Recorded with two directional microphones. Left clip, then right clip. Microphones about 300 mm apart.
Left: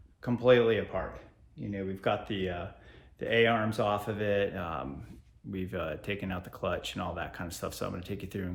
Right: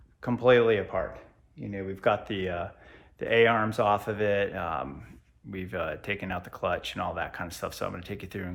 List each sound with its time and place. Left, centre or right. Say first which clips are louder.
0.2 s speech: right 2 dB; right; by 8.5 s centre